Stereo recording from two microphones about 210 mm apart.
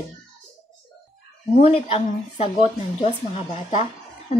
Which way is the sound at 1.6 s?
30° left (ahead or behind).